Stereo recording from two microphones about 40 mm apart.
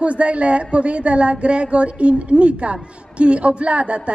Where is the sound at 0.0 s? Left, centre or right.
Right.